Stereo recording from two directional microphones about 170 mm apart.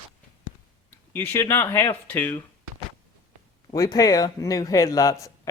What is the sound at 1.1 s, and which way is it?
Speech, 15° left (ahead or behind).